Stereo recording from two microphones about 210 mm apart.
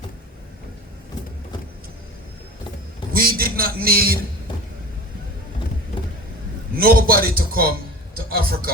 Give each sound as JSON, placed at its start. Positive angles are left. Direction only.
{"t": 3.1, "sound": "a man's voice", "side_deg": -45}
{"t": 6.7, "sound": "a man's voice", "side_deg": -45}